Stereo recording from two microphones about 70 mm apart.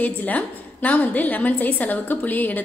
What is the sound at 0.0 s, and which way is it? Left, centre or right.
A woman's voice, left.